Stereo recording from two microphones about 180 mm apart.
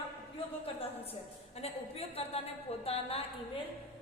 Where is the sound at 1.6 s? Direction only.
35° left (ahead or behind).